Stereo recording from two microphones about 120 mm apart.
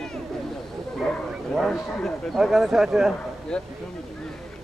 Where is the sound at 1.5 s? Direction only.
Centre (ahead or behind).